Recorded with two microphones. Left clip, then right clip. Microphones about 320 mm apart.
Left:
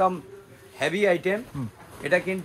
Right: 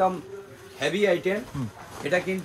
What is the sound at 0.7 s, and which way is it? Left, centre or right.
Speech, centre.